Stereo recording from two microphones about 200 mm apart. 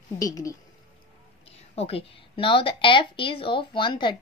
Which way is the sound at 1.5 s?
30° left (ahead or behind).